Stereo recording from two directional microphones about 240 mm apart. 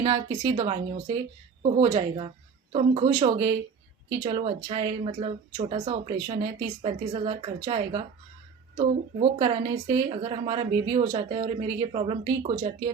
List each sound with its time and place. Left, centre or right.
0.0 s speech: centre